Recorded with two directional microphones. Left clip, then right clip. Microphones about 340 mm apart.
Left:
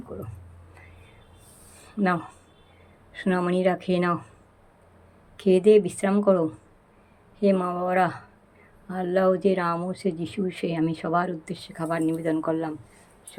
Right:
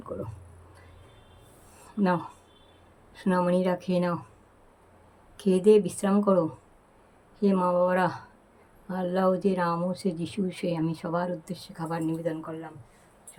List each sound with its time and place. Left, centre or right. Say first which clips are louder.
2.0 s speech: left 2 dB; centre
5.4 s speech: left 3 dB; centre
7.3 s speech: even; centre